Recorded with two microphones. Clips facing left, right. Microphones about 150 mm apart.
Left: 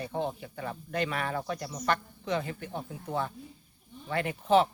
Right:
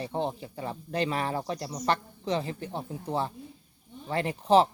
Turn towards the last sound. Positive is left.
turn(degrees=-35)  # may be behind; listen again after turning